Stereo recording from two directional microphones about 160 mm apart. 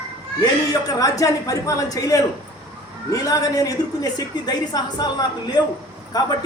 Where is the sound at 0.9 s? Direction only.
20° left (ahead or behind).